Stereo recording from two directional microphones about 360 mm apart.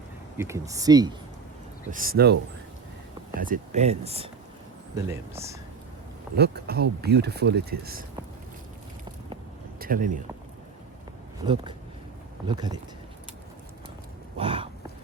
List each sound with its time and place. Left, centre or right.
0.3 s speech: centre
1.9 s speech: right; by 5.5 s centre
6.3 s speech: right
9.7 s speech: right
12.5 s speech: centre
14.3 s a sound: centre